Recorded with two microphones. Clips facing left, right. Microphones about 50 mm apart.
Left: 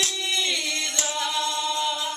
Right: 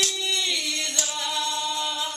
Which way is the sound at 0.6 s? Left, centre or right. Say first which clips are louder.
Left 1 dB; left.